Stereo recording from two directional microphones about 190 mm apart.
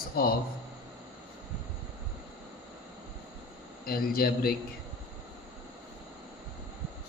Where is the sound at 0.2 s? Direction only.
50° left (ahead or behind).